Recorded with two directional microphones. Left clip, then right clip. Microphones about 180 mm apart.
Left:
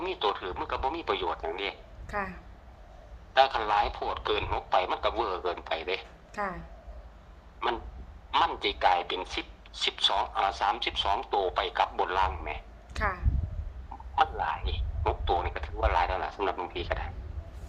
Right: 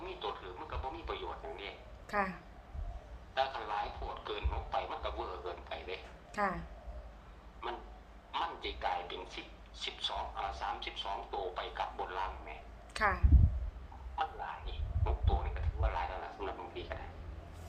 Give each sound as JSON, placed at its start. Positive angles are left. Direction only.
{"t": 0.0, "sound": "radio", "side_deg": 65}
{"t": 2.0, "sound": "a woman's voice", "side_deg": -5}
{"t": 3.3, "sound": "a woman's voice", "side_deg": 65}
{"t": 6.3, "sound": "a woman's voice", "side_deg": -5}
{"t": 7.6, "sound": "a woman's voice", "side_deg": 60}
{"t": 12.9, "sound": "speech", "side_deg": -5}
{"t": 14.2, "sound": "speech", "side_deg": 65}